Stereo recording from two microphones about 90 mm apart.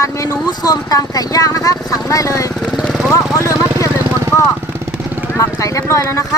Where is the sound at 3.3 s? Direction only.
35° left (ahead or behind).